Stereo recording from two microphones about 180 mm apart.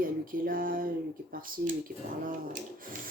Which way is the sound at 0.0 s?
50° right (ahead or behind).